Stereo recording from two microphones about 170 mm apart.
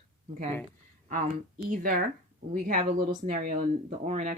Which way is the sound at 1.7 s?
55° right (ahead or behind).